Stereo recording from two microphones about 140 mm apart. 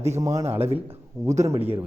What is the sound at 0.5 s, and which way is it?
A man's voice, 45° right (ahead or behind).